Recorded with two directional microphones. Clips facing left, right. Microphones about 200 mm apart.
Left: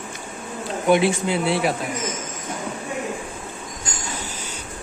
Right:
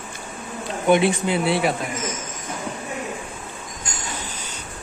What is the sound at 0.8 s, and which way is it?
Speech, centre (ahead or behind).